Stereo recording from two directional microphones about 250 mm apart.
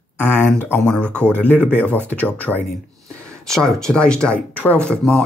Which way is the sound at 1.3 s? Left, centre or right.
Centre.